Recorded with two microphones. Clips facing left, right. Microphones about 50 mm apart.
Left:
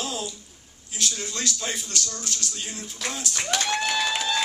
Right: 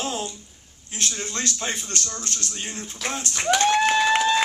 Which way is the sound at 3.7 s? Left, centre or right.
Right.